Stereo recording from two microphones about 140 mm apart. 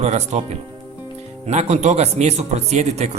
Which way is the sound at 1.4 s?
50° right (ahead or behind).